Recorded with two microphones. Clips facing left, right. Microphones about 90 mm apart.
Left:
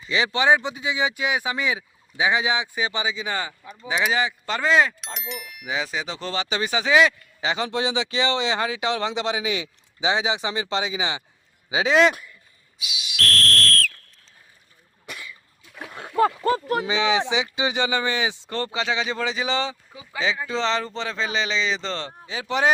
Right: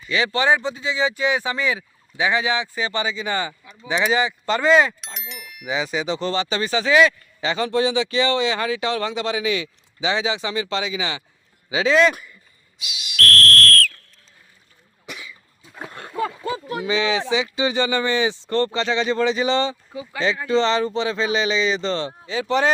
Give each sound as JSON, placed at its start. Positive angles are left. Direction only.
{"t": 0.1, "sound": "speech", "side_deg": 20}
{"t": 12.1, "sound": "speech", "side_deg": 0}
{"t": 13.3, "sound": "whistle", "side_deg": -45}
{"t": 15.0, "sound": "cough", "side_deg": -5}
{"t": 15.9, "sound": "a sound", "side_deg": 0}
{"t": 16.4, "sound": "speech", "side_deg": 50}
{"t": 16.8, "sound": "speech", "side_deg": 20}